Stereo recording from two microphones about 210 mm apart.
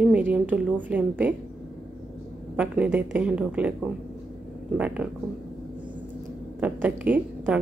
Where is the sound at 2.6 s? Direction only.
5° right (ahead or behind).